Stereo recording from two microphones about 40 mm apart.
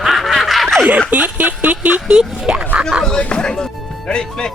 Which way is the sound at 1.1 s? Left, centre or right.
Right.